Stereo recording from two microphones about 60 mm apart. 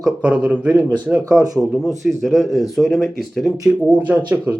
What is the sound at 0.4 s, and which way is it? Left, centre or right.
Speech, right.